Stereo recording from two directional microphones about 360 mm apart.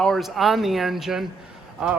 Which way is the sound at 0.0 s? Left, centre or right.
Centre.